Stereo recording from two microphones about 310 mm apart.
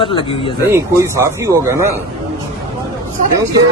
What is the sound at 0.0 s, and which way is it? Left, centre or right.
Speech, centre.